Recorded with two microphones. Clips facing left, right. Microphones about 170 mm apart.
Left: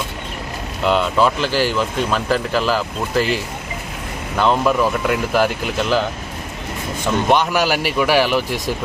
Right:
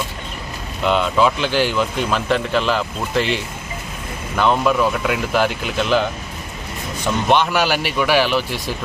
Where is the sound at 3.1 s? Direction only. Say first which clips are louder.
Left 1 dB; 25° right (ahead or behind).